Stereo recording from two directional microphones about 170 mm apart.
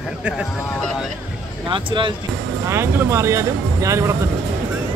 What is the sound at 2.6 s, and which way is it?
Speech, 15° right (ahead or behind).